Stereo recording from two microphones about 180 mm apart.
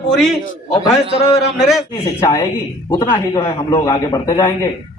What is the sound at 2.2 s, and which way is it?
A man's voice, 20° left (ahead or behind).